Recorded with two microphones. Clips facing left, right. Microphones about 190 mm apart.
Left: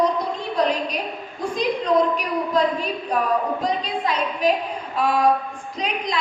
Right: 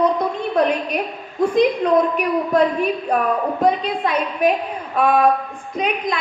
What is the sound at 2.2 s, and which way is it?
A woman's voice, 60° right (ahead or behind).